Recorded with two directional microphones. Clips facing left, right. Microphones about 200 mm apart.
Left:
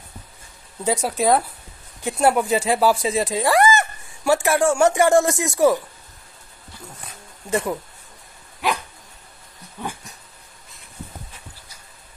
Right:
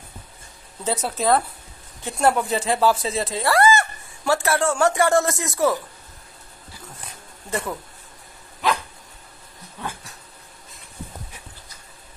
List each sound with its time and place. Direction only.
0.8 s speech: 10° left (ahead or behind)
7.4 s speech: 15° left (ahead or behind)
9.8 s dog: 15° left (ahead or behind)